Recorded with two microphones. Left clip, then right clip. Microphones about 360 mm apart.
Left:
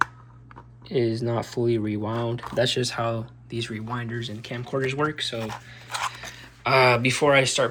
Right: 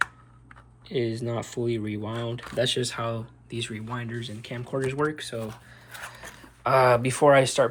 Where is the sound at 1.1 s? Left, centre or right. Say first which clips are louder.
Left 4 dB; centre.